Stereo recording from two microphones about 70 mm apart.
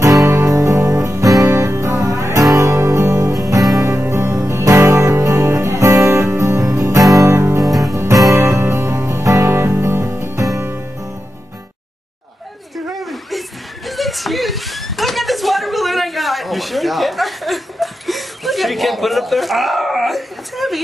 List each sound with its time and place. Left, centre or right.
0.0 s music: right
1.5 s music: right
12.7 s a sound: centre